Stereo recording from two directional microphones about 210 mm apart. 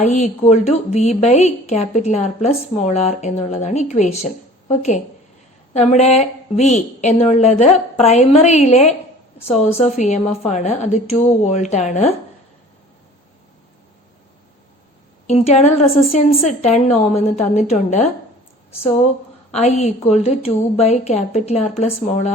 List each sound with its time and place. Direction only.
0.0 s a woman's voice: 35° left (ahead or behind)
15.3 s a woman's voice: 30° left (ahead or behind)